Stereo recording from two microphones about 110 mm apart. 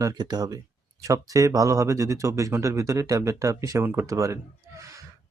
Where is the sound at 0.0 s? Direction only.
35° right (ahead or behind).